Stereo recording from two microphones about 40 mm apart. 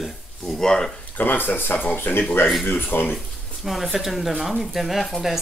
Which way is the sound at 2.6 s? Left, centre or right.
Left.